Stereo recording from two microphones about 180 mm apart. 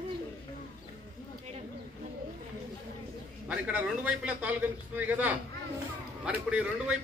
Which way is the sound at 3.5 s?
10° right (ahead or behind).